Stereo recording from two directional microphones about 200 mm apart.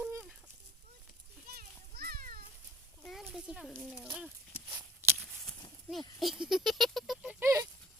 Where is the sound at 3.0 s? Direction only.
Centre (ahead or behind).